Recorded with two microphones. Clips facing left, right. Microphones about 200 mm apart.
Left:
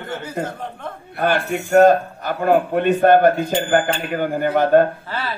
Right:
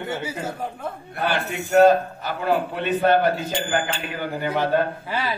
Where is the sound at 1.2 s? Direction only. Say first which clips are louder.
Left 5 dB; 45° left (ahead or behind).